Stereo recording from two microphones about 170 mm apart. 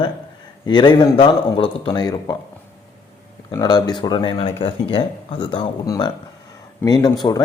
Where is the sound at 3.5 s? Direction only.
20° left (ahead or behind).